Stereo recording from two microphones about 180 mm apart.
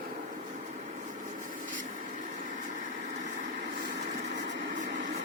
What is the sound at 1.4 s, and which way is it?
Vehicle, 45° right (ahead or behind).